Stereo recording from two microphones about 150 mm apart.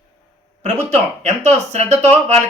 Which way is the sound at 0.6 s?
50° right (ahead or behind).